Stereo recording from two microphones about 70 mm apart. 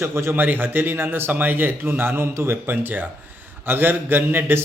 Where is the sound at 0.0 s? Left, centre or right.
Right.